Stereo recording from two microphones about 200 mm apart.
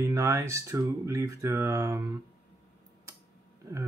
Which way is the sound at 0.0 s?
15° right (ahead or behind).